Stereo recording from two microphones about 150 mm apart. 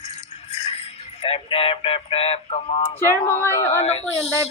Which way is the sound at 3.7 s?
45° left (ahead or behind).